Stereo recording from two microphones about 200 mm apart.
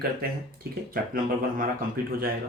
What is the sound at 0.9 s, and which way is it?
Speech, 45° right (ahead or behind).